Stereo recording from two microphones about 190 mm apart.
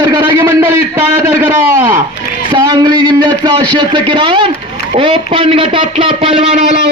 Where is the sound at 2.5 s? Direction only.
20° right (ahead or behind).